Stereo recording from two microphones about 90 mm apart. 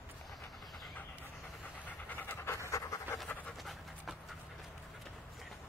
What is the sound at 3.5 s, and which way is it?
Pant, centre (ahead or behind).